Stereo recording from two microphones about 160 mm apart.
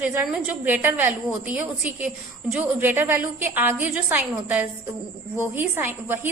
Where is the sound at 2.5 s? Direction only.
10° right (ahead or behind).